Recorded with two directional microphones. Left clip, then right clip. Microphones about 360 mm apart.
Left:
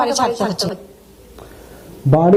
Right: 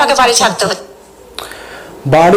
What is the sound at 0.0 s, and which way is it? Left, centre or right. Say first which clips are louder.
Speech: right 8 dB; centre.